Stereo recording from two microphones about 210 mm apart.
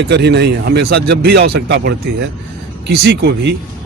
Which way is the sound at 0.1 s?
55° right (ahead or behind).